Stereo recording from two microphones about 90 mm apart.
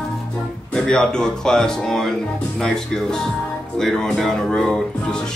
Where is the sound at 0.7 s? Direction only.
10° left (ahead or behind).